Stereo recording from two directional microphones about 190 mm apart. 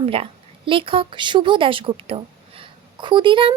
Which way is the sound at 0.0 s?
30° right (ahead or behind).